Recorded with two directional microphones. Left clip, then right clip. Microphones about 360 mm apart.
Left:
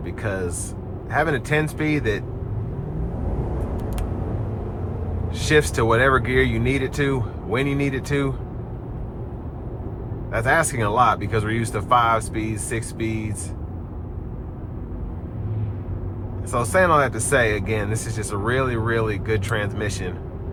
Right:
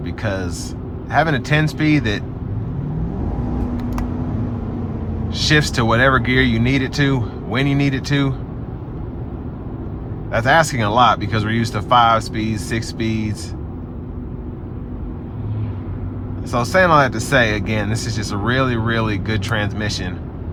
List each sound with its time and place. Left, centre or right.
0.0 s vehicle: centre
1.1 s speech: centre
5.5 s speech: centre
10.3 s speech: centre
16.5 s speech: centre